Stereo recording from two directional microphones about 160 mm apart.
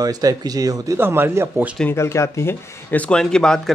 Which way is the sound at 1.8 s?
15° left (ahead or behind).